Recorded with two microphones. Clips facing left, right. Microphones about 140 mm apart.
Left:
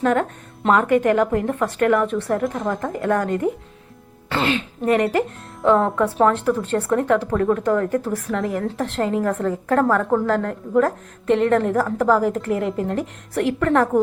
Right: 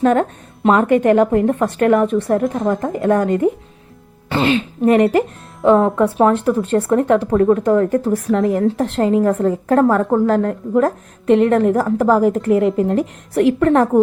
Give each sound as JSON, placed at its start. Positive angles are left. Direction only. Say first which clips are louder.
{"t": 0.0, "sound": "speech", "louder": "right 5 dB", "side_deg": -25}